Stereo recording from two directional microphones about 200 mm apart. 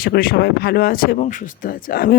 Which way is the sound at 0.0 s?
45° left (ahead or behind).